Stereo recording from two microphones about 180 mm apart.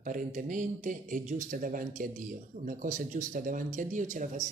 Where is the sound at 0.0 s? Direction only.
45° right (ahead or behind).